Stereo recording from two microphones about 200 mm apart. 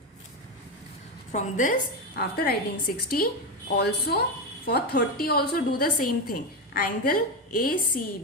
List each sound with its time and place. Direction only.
1.3 s a woman's voice: 35° left (ahead or behind)
2.1 s a woman's voice: 50° left (ahead or behind)